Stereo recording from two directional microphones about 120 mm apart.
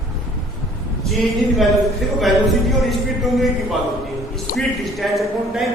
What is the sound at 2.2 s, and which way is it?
A man's voice, centre (ahead or behind).